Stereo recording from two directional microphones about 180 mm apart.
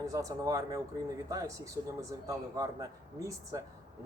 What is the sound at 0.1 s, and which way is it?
Speech, 20° right (ahead or behind).